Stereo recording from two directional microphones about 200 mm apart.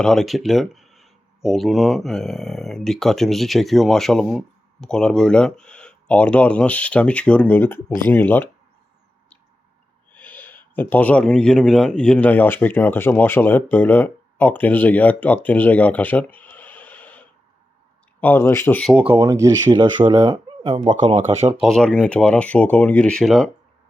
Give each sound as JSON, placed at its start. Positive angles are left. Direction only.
{"t": 0.0, "sound": "speech", "side_deg": 0}
{"t": 10.1, "sound": "speech", "side_deg": 5}
{"t": 18.9, "sound": "speech", "side_deg": -10}
{"t": 21.6, "sound": "speech", "side_deg": 5}